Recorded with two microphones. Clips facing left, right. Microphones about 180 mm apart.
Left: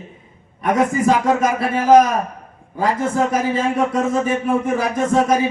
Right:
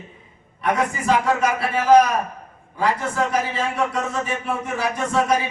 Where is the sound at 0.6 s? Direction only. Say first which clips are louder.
Left 5 dB; 45° left (ahead or behind).